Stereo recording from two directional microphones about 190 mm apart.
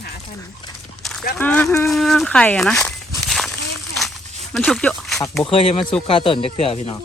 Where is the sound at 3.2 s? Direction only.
Centre (ahead or behind).